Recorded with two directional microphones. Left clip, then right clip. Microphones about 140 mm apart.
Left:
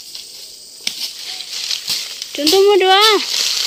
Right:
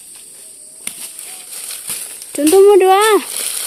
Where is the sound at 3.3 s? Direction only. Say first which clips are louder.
Left 8 dB; 10° right (ahead or behind).